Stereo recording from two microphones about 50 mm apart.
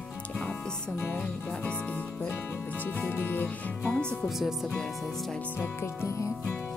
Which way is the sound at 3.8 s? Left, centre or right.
Centre.